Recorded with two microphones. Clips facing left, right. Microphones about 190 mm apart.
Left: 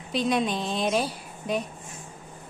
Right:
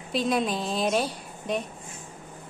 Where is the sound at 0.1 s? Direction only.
Centre (ahead or behind).